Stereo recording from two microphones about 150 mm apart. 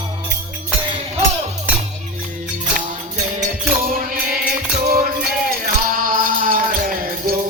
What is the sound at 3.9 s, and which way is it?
Music, 70° right (ahead or behind).